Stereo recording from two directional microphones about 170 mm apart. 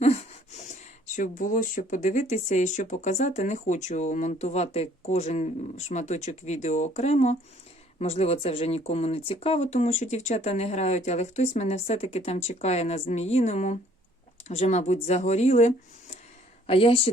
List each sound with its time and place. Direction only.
0.0 s speech: 40° left (ahead or behind)